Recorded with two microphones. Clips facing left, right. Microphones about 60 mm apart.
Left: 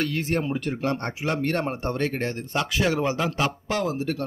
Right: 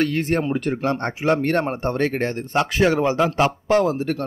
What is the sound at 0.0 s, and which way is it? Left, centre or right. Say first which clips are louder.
Speech: right 5 dB; right.